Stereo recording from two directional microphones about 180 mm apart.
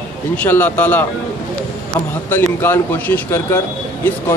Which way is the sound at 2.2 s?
10° left (ahead or behind).